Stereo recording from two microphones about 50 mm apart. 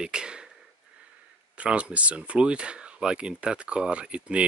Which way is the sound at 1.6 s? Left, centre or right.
Right.